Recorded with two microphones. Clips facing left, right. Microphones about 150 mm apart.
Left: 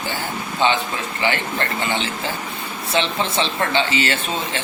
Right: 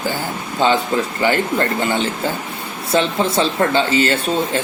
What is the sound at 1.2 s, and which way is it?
Speech, 45° right (ahead or behind).